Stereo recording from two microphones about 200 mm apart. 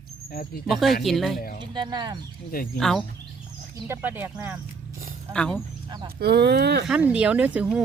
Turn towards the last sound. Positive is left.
turn(degrees=-5)  # may be behind; listen again after turning